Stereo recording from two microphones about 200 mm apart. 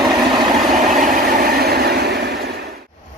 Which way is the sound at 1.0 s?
45° right (ahead or behind).